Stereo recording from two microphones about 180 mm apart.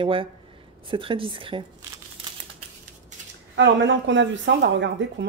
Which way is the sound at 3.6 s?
90° right.